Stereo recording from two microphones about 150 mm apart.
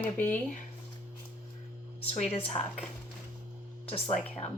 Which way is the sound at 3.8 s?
40° left (ahead or behind).